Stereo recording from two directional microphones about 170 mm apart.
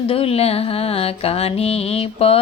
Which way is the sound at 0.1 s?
35° left (ahead or behind).